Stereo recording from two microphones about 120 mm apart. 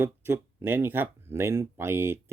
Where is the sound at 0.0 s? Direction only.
20° right (ahead or behind).